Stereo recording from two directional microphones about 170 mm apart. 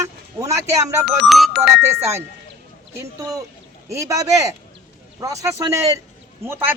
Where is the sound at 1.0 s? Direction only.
Centre (ahead or behind).